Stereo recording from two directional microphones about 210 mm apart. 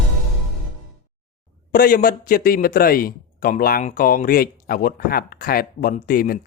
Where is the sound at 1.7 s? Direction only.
45° left (ahead or behind).